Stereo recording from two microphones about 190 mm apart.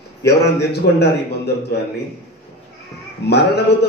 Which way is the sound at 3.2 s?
60° left (ahead or behind).